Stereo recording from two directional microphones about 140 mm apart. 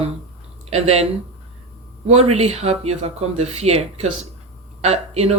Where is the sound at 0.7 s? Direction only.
50° right (ahead or behind).